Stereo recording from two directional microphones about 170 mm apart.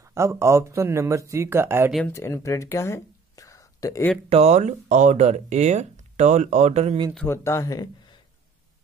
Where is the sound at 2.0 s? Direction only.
15° left (ahead or behind).